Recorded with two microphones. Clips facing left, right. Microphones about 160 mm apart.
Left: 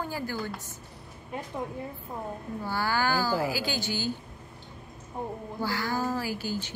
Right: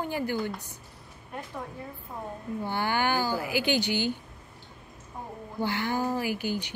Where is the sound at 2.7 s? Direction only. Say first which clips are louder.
Even; 20° right (ahead or behind).